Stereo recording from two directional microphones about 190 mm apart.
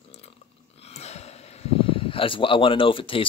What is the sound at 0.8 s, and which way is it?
Speech, 35° left (ahead or behind).